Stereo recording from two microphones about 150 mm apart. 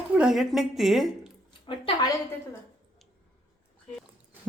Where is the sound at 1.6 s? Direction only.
35° left (ahead or behind).